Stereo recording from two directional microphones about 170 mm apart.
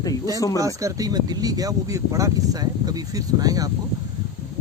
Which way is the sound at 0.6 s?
20° right (ahead or behind).